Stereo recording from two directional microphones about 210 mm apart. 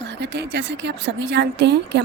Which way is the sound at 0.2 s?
55° right (ahead or behind).